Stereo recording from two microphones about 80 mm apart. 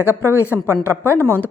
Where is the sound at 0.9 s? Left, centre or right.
Right.